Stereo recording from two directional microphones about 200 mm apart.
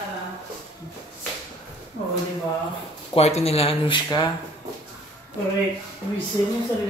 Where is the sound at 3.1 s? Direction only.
30° left (ahead or behind).